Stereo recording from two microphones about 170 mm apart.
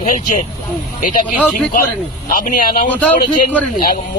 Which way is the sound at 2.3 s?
55° left (ahead or behind).